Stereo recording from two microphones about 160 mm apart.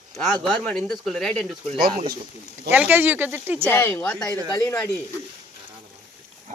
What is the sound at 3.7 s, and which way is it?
Speech, 15° left (ahead or behind).